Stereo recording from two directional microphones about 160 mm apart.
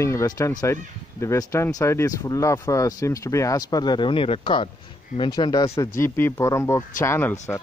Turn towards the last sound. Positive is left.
turn(degrees=15)  # may be behind; listen again after turning